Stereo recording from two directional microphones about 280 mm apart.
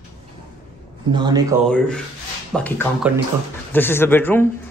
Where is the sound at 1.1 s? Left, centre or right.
Centre.